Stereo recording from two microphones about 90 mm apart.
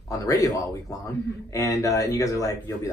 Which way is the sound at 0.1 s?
40° left (ahead or behind).